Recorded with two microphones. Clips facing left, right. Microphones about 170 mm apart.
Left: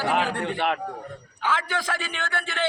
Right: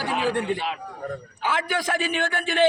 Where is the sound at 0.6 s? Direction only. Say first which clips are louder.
Left 5 dB; 60° left (ahead or behind).